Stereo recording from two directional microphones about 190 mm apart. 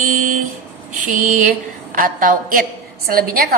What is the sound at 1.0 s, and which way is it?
A woman's voice, 45° right (ahead or behind).